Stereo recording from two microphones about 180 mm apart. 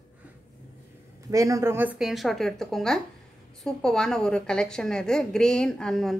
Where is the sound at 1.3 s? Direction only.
20° right (ahead or behind).